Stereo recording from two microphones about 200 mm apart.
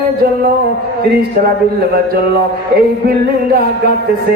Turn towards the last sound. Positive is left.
turn(degrees=-50)  # may be behind; listen again after turning